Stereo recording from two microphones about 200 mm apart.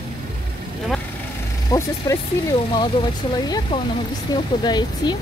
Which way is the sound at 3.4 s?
20° left (ahead or behind).